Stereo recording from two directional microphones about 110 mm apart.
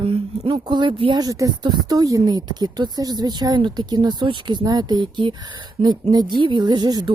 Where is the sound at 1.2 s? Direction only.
35° right (ahead or behind).